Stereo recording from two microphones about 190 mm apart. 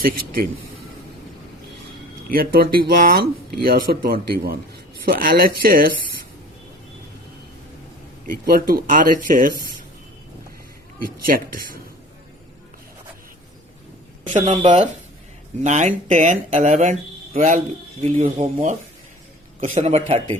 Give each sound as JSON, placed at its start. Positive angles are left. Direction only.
{"t": 2.3, "sound": "speech", "side_deg": -50}
{"t": 8.3, "sound": "speech", "side_deg": -50}
{"t": 11.0, "sound": "speech", "side_deg": -45}
{"t": 14.5, "sound": "speech", "side_deg": -35}